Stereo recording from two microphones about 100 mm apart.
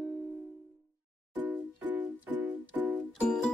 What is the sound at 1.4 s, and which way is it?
Music, 20° right (ahead or behind).